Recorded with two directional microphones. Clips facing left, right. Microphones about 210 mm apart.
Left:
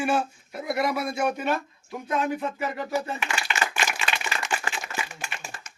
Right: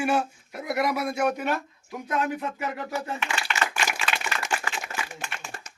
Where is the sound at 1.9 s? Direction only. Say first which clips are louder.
Left 1 dB; centre (ahead or behind).